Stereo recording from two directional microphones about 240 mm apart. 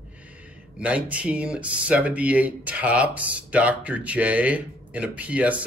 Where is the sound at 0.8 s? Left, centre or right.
Centre.